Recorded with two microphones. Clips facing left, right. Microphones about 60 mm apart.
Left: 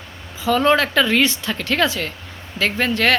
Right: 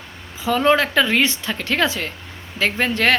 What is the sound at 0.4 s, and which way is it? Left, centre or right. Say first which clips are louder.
Speech: left 1 dB; centre.